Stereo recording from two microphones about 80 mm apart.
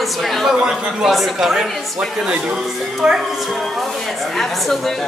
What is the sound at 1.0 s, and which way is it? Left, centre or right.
A woman's voice, centre.